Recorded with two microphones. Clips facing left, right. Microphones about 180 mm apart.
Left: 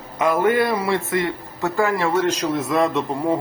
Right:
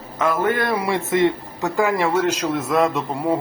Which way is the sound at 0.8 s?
15° right (ahead or behind).